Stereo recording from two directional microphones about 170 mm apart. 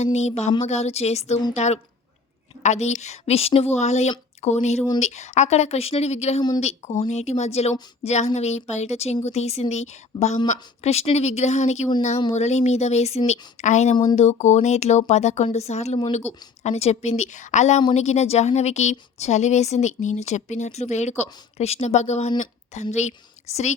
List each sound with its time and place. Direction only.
0.0 s speech: 40° left (ahead or behind)
13.9 s speech: 25° left (ahead or behind)
14.2 s a woman's voice: 40° left (ahead or behind)